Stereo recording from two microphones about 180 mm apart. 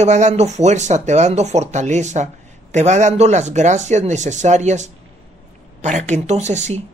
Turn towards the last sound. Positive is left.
turn(degrees=-40)  # may be behind; listen again after turning